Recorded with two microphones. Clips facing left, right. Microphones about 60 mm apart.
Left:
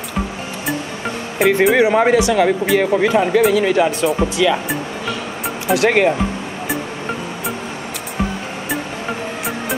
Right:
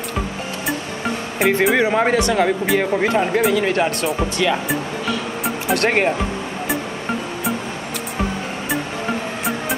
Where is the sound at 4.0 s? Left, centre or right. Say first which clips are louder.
Left 4 dB; centre.